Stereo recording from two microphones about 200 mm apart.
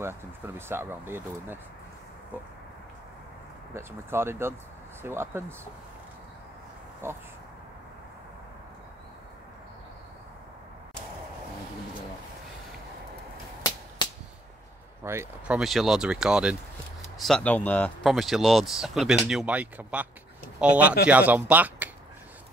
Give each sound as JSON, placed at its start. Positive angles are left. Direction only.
{"t": 0.6, "sound": "speech", "side_deg": -10}
{"t": 3.7, "sound": "speech", "side_deg": -10}
{"t": 7.0, "sound": "speech", "side_deg": -10}
{"t": 13.6, "sound": "a sound", "side_deg": 20}
{"t": 15.0, "sound": "speech", "side_deg": -10}